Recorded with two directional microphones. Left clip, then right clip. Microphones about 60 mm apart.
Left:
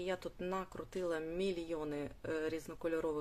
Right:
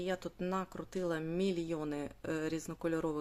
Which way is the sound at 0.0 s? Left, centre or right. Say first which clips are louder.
Right 2 dB; right.